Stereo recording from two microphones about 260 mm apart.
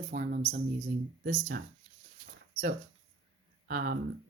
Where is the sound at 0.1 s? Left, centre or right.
Right.